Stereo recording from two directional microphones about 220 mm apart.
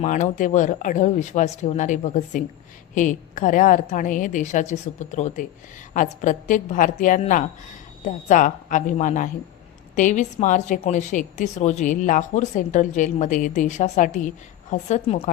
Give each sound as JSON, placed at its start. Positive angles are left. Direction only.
{"t": 0.0, "sound": "a woman's voice", "side_deg": 35}